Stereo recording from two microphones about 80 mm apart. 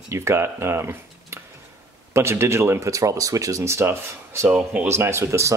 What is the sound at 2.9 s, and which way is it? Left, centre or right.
Speech, right.